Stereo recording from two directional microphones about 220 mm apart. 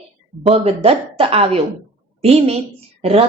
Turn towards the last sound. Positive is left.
turn(degrees=-25)  # may be behind; listen again after turning